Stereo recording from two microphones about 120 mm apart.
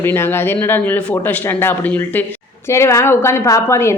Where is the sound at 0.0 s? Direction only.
20° left (ahead or behind).